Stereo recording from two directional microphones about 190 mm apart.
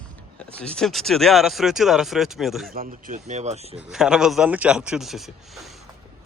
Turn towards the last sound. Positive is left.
turn(degrees=0)  # may be behind; listen again after turning